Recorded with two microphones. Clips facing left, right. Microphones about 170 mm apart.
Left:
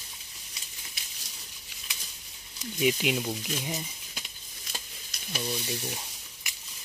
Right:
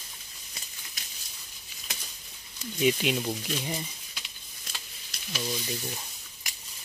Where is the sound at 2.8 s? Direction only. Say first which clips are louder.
Right 1 dB; 10° left (ahead or behind).